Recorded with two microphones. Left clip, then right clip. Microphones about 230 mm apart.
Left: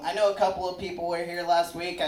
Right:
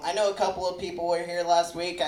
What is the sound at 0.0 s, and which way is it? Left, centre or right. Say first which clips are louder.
A man's voice: left 1 dB; right.